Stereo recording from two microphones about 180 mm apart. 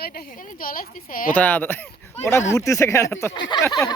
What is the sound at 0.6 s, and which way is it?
Speech, 50° left (ahead or behind).